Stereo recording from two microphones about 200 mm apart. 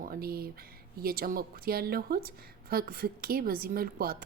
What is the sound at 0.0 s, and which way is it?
A woman's voice, 50° right (ahead or behind).